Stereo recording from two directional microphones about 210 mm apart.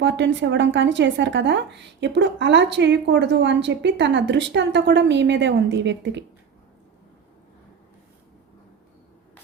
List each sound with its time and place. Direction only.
0.0 s speech: 60° right (ahead or behind)